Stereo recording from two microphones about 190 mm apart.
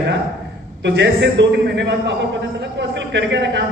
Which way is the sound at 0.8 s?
65° right (ahead or behind).